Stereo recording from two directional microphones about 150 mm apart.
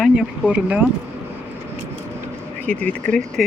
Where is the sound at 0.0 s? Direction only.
5° right (ahead or behind).